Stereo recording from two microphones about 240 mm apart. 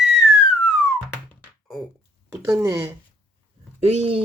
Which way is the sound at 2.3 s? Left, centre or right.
Centre.